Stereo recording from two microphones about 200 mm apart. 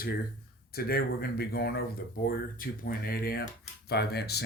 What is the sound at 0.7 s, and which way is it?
Speech, 50° left (ahead or behind).